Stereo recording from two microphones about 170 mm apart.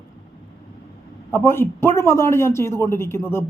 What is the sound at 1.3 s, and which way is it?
A man's voice, 15° left (ahead or behind).